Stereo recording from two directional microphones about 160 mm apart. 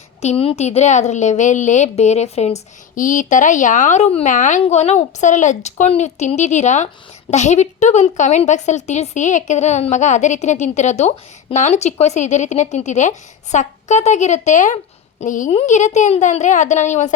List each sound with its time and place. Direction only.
0.2 s a woman's voice: 40° left (ahead or behind)